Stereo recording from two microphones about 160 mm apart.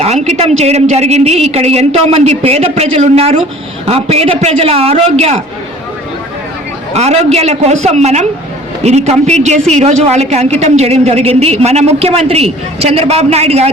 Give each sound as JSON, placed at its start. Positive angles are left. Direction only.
{"t": 0.0, "sound": "a woman's voice", "side_deg": -40}
{"t": 6.9, "sound": "a man's voice", "side_deg": -40}